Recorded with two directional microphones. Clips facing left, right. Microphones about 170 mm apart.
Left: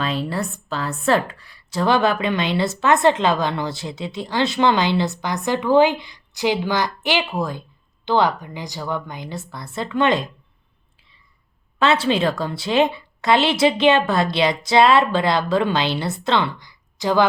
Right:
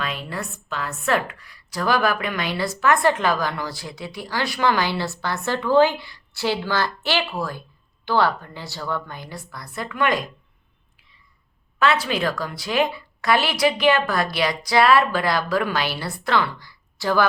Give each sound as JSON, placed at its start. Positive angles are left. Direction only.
{"t": 0.0, "sound": "speech", "side_deg": 30}
{"t": 11.8, "sound": "speech", "side_deg": 25}